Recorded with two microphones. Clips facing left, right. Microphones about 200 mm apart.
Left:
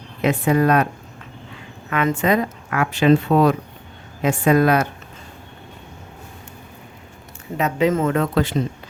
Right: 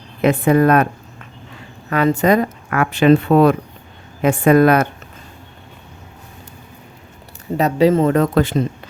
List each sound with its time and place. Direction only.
0.2 s a woman's voice: 55° right (ahead or behind)
1.9 s a woman's voice: 35° right (ahead or behind); by 4.9 s 55° right (ahead or behind)
7.5 s speech: 35° right (ahead or behind)